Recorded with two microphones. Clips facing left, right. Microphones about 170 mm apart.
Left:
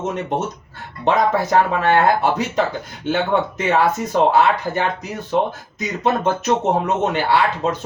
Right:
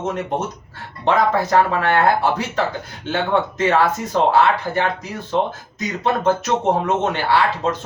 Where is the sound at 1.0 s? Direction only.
20° left (ahead or behind).